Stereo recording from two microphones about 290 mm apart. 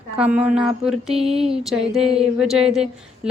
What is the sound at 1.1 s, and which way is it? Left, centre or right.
Speech, centre.